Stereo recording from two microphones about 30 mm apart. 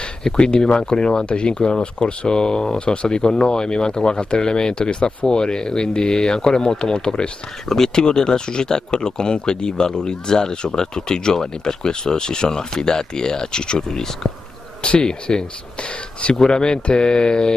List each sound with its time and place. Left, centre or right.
0.4 s speech: left
7.6 s speech: centre
8.0 s speech: left
13.8 s speech: centre
15.0 s speech: left
16.4 s speech: left